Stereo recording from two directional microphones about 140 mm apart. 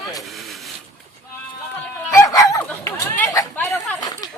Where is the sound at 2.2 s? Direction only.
25° left (ahead or behind).